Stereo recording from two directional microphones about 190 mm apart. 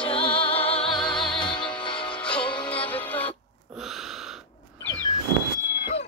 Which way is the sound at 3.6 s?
Centre (ahead or behind).